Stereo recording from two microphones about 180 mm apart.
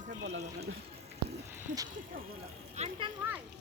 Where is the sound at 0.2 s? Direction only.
75° right (ahead or behind).